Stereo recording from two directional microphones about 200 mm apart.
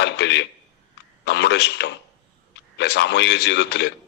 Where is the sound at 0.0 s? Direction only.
60° left (ahead or behind).